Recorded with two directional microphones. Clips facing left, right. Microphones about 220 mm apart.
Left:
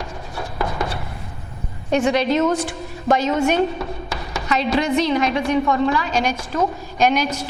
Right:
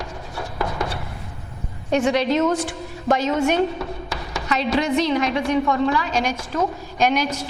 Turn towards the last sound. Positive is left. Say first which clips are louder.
# left 2 dB
turn(degrees=10)  # may be behind; listen again after turning